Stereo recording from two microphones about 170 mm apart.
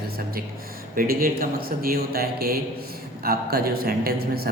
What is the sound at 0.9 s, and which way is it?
Speech, 55° right (ahead or behind).